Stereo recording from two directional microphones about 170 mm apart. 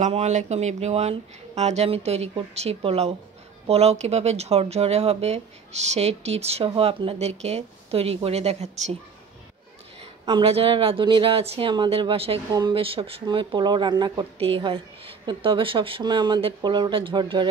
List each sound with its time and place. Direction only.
0.0 s speech: 45° right (ahead or behind)
9.9 s speech: 30° right (ahead or behind)